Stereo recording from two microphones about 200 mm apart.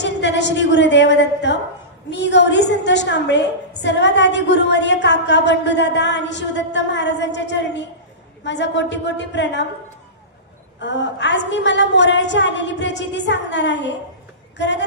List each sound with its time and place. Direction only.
0.0 s a woman's voice: 60° left (ahead or behind)
10.8 s a woman's voice: 60° left (ahead or behind)